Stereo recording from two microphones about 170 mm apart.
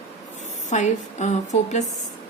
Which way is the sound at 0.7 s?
45° left (ahead or behind).